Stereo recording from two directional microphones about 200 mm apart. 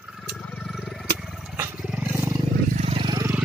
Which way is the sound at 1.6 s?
10° right (ahead or behind).